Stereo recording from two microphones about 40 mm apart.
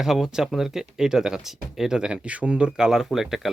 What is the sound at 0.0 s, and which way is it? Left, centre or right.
Speech, centre.